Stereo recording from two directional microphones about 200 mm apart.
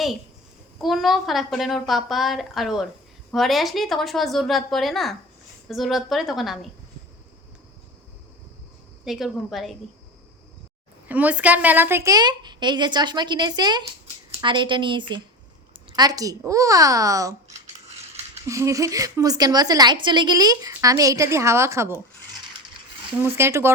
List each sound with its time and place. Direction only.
0.8 s a woman's voice: centre (ahead or behind)
9.0 s a woman's voice: centre (ahead or behind)
11.1 s a woman's voice: 5° right (ahead or behind)
18.4 s a woman's voice: 15° right (ahead or behind)
23.2 s a woman's voice: 15° right (ahead or behind)